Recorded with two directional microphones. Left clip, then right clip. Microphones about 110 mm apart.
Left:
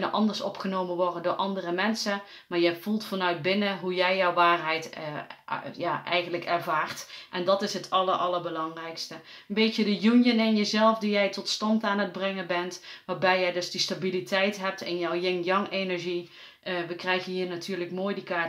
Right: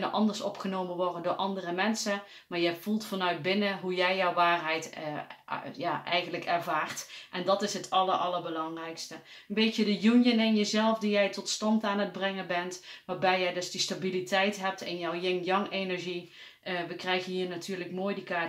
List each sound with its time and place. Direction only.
0.0 s speech: 25° left (ahead or behind)
9.5 s speech: 25° left (ahead or behind)